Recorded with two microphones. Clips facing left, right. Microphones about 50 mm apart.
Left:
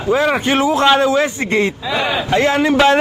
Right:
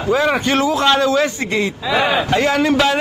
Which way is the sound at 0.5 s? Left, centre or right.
Left.